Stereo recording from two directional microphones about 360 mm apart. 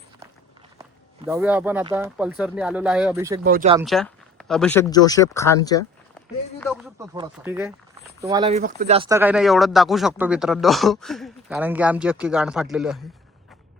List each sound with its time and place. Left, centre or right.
1.3 s speech: centre
3.4 s speech: right
3.8 s speech: centre
7.0 s speech: centre